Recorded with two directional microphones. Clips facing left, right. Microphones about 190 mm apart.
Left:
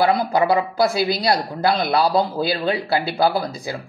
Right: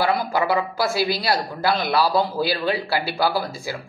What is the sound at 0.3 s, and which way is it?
Speech, 20° left (ahead or behind).